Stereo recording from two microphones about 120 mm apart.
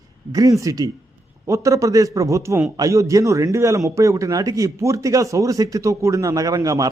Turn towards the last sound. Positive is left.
turn(degrees=-30)  # may be behind; listen again after turning